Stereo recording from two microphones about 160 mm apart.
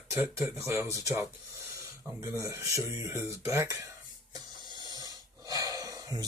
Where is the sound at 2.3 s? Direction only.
20° right (ahead or behind).